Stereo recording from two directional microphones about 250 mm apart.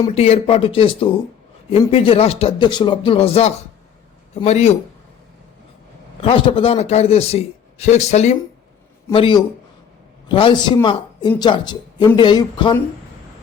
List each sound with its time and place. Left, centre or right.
0.1 s a man's voice: left
6.2 s a man's voice: left